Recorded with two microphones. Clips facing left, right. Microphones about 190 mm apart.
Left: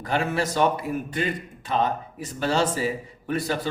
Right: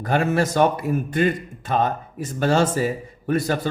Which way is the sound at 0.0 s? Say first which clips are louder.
Right 5 dB; 45° right (ahead or behind).